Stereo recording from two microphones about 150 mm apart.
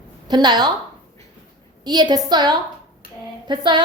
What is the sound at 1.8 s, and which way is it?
A woman's voice, 25° right (ahead or behind).